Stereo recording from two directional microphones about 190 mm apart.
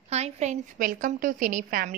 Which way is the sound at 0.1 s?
35° right (ahead or behind).